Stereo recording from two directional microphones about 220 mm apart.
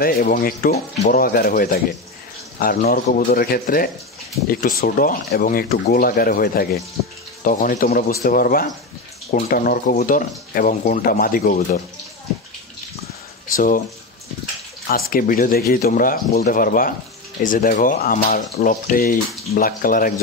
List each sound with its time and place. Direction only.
0.0 s speech: 40° left (ahead or behind)
14.9 s speech: 40° left (ahead or behind)